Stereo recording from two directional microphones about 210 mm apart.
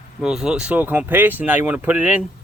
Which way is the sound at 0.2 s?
5° right (ahead or behind).